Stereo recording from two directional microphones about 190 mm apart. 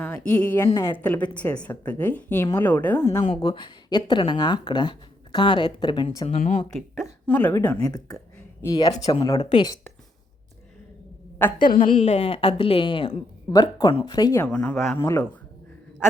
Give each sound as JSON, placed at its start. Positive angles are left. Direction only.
{"t": 0.0, "sound": "a woman's voice", "side_deg": 5}
{"t": 3.4, "sound": "speech", "side_deg": 25}
{"t": 6.2, "sound": "a woman's voice", "side_deg": 40}
{"t": 6.7, "sound": "a woman's voice", "side_deg": 0}
{"t": 7.9, "sound": "speech", "side_deg": 20}
{"t": 11.6, "sound": "a woman's voice", "side_deg": 45}
{"t": 14.4, "sound": "a woman's voice", "side_deg": 5}